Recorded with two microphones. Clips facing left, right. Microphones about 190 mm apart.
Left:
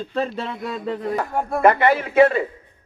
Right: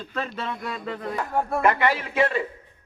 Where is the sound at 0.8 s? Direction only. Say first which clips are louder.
Left 7 dB; 35° left (ahead or behind).